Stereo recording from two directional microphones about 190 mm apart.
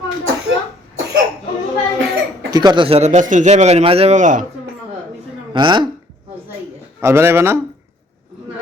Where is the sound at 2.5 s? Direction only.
20° right (ahead or behind); by 4.5 s 40° right (ahead or behind).